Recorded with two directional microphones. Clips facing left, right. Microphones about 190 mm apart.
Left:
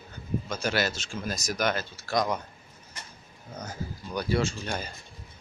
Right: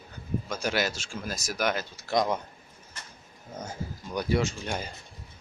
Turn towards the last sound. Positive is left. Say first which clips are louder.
# even
turn(degrees=-15)  # may be behind; listen again after turning